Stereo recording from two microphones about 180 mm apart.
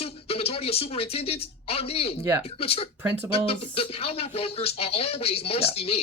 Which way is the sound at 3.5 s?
30° left (ahead or behind).